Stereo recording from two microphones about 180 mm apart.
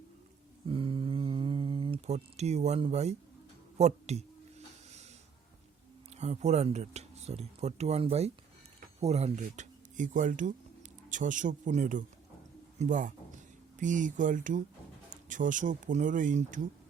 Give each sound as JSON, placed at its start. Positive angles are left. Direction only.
{"t": 0.7, "sound": "mantra", "side_deg": -30}
{"t": 3.8, "sound": "speech", "side_deg": -35}
{"t": 6.1, "sound": "speech", "side_deg": -40}